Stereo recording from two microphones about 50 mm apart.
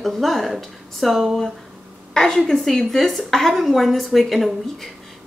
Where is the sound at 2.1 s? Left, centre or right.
Centre.